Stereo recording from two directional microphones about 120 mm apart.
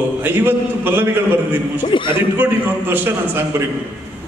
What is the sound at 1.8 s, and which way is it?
Speech, 45° left (ahead or behind).